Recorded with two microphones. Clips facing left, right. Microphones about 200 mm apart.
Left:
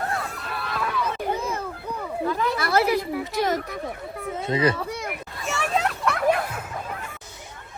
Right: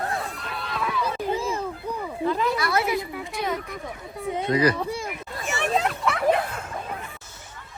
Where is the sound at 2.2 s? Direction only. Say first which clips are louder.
Right 1 dB; 15° right (ahead or behind).